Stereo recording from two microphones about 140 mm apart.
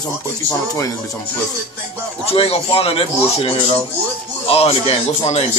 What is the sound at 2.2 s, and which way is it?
Speech, 45° left (ahead or behind).